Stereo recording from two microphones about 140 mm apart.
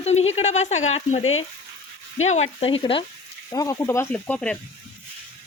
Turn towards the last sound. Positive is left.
turn(degrees=10)  # may be behind; listen again after turning